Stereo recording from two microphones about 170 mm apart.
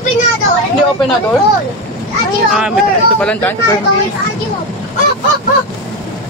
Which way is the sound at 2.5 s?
5° right (ahead or behind).